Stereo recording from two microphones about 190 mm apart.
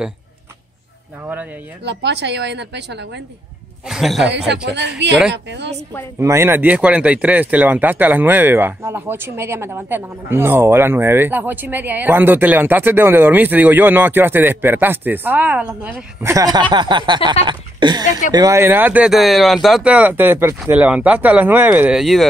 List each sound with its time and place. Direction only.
1.2 s a sound: 10° right (ahead or behind)
1.9 s speech: 65° right (ahead or behind)
3.8 s a man's voice: centre (ahead or behind)
4.6 s speech: 65° right (ahead or behind)
6.1 s speech: 15° right (ahead or behind)